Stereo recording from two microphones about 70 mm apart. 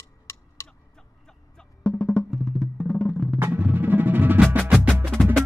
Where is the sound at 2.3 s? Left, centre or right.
Centre.